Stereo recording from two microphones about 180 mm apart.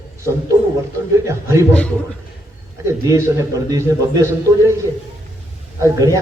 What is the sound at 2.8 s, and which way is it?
A man's voice, 15° right (ahead or behind).